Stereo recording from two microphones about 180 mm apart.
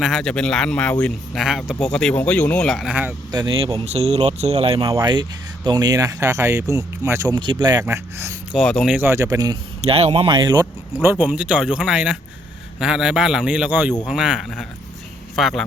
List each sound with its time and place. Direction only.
0.0 s speech: centre (ahead or behind)
2.9 s speech: 10° right (ahead or behind)
3.3 s speech: 30° right (ahead or behind)
4.8 s speech: 20° right (ahead or behind)
8.5 s speech: centre (ahead or behind)
9.0 s speech: 15° right (ahead or behind)
9.9 s speech: 35° right (ahead or behind)
11.0 s speech: 10° right (ahead or behind)